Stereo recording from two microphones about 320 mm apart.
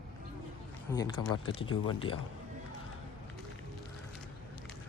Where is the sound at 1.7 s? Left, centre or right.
Centre.